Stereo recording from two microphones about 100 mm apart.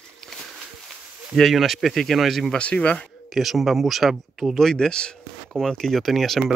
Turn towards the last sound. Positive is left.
turn(degrees=0)  # may be behind; listen again after turning